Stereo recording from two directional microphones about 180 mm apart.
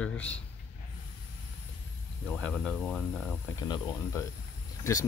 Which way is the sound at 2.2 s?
5° left (ahead or behind).